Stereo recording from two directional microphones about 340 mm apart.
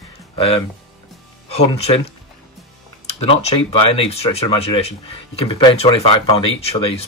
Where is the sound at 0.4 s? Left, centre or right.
Centre.